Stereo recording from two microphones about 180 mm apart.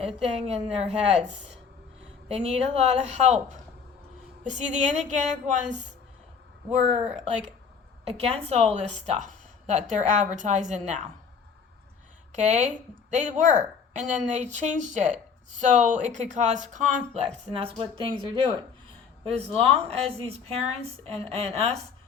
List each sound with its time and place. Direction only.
0.0 s a woman's voice: 35° right (ahead or behind)
2.3 s a woman's voice: 35° right (ahead or behind)
8.0 s a woman's voice: 35° right (ahead or behind)
12.3 s a woman's voice: 40° right (ahead or behind)
19.5 s a woman's voice: 35° right (ahead or behind)